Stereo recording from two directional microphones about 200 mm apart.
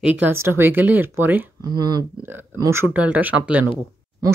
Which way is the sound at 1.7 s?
20° right (ahead or behind).